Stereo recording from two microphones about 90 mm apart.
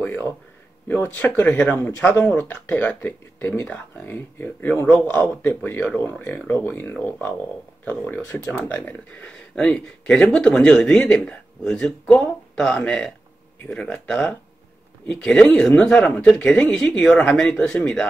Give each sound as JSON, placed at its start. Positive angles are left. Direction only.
{"t": 0.0, "sound": "speech", "side_deg": 20}